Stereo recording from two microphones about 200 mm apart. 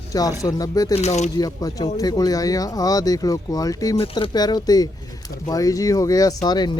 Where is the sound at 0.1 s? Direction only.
20° left (ahead or behind).